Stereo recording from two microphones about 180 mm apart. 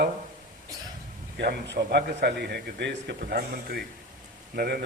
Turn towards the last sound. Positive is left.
turn(degrees=-60)  # may be behind; listen again after turning